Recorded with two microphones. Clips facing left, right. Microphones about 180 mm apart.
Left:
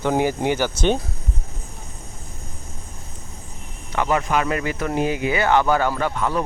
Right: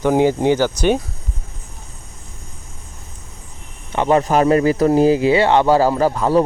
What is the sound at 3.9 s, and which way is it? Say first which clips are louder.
Speech: right 6 dB; 25° right (ahead or behind).